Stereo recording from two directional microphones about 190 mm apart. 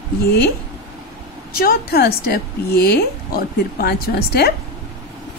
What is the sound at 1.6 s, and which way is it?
A woman's voice, 55° left (ahead or behind).